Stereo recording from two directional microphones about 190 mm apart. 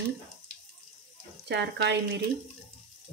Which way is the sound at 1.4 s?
65° right (ahead or behind).